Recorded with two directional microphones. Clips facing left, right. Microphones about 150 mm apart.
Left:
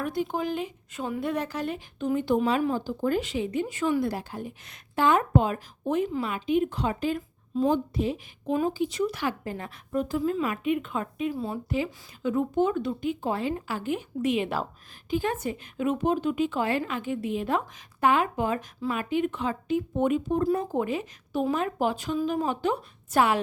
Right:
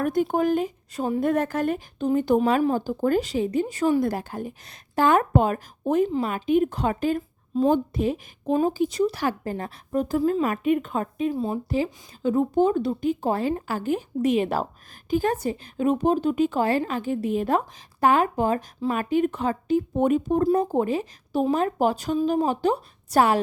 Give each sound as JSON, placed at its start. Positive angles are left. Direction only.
{"t": 0.0, "sound": "speech", "side_deg": -50}
{"t": 2.0, "sound": "speech", "side_deg": -40}
{"t": 8.8, "sound": "speech", "side_deg": -35}
{"t": 11.3, "sound": "speech", "side_deg": -20}
{"t": 11.7, "sound": "speech", "side_deg": -35}